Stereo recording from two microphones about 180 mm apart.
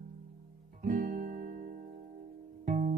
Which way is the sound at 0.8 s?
50° right (ahead or behind).